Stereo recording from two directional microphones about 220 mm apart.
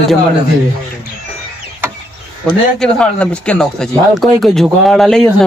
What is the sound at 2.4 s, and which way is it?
A man's voice, 5° left (ahead or behind).